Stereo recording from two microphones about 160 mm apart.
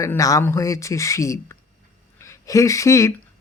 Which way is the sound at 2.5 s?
20° left (ahead or behind).